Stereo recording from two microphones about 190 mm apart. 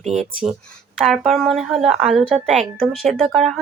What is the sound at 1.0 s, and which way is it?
Speech, centre (ahead or behind).